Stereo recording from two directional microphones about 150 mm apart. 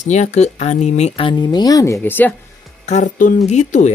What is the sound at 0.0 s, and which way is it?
Speech, 50° left (ahead or behind).